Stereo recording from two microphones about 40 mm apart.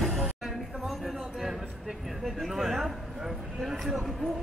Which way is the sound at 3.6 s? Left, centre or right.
Centre.